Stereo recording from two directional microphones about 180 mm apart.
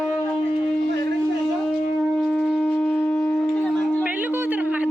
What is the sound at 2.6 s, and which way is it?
Shofar, 15° left (ahead or behind).